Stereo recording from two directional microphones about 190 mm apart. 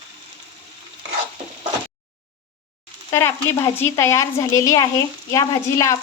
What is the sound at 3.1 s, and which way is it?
A woman's voice, 15° left (ahead or behind).